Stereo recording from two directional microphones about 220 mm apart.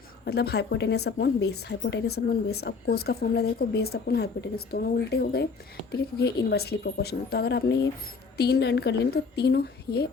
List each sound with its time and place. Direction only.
0.3 s a woman's voice: 50° left (ahead or behind)